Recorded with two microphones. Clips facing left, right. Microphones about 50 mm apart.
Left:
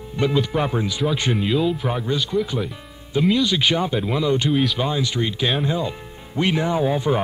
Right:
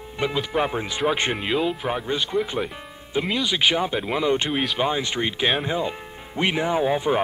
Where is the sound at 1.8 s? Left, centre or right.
Centre.